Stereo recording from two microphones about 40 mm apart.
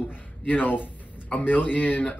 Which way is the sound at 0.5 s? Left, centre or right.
Left.